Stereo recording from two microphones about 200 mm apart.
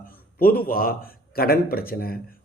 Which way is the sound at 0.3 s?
45° left (ahead or behind).